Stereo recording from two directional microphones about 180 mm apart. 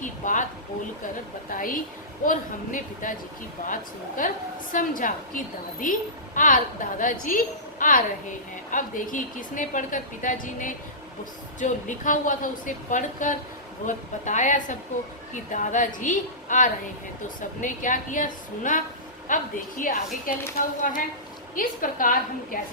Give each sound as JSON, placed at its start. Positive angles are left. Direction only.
{"t": 0.0, "sound": "a sound", "side_deg": 45}
{"t": 1.5, "sound": "a woman's voice", "side_deg": 50}
{"t": 4.2, "sound": "a woman's voice", "side_deg": 45}